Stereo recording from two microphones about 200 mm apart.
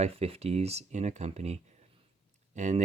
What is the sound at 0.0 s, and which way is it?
Speech, 30° right (ahead or behind).